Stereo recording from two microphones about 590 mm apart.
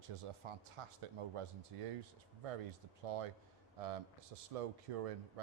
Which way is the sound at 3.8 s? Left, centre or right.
Right.